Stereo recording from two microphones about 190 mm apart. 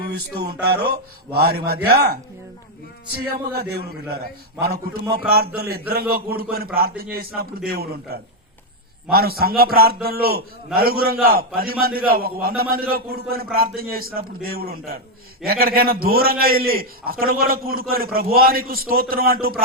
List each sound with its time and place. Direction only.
0.6 s speech: 55° right (ahead or behind)
3.6 s a man's voice: 55° right (ahead or behind)